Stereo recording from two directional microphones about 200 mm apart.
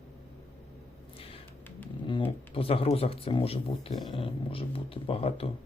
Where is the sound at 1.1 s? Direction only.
30° left (ahead or behind).